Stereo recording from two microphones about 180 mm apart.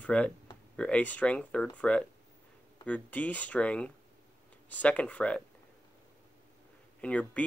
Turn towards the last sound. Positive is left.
turn(degrees=5)  # may be behind; listen again after turning